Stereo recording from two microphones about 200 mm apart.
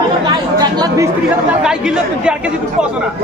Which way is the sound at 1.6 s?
5° right (ahead or behind).